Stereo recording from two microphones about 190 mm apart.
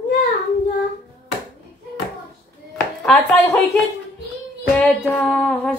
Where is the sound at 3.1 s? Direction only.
5° left (ahead or behind).